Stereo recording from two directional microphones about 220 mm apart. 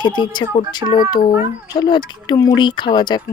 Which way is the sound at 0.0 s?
20° left (ahead or behind).